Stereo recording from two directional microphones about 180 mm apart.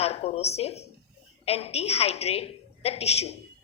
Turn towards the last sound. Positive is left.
turn(degrees=35)  # may be behind; listen again after turning